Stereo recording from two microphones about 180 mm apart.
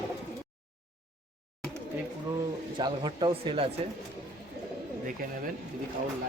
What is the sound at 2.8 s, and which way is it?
Speech, 25° right (ahead or behind).